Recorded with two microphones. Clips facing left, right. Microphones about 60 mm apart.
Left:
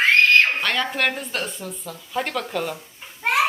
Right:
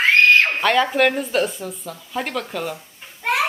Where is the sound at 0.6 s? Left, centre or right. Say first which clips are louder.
Right 6 dB; centre.